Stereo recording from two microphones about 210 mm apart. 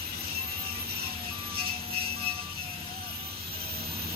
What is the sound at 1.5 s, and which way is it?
Music, 25° right (ahead or behind).